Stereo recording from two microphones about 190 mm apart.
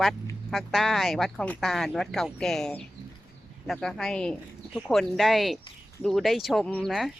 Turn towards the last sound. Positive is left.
turn(degrees=0)  # may be behind; listen again after turning